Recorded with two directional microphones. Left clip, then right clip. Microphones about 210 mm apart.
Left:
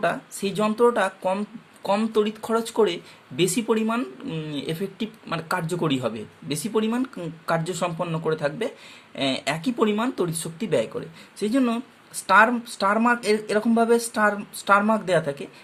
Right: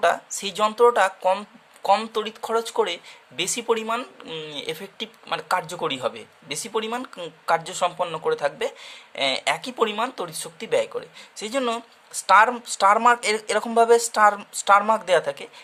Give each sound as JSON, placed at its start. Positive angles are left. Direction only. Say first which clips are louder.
{"t": 0.0, "sound": "speech", "louder": "right 3 dB", "side_deg": -25}